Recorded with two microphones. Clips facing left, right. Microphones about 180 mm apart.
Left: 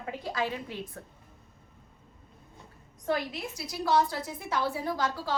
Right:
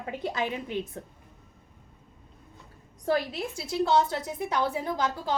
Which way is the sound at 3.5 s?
25° right (ahead or behind).